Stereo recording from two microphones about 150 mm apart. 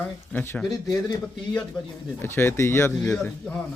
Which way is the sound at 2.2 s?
15° left (ahead or behind).